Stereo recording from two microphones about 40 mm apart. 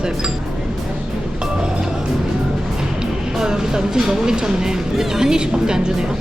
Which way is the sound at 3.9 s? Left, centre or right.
Centre.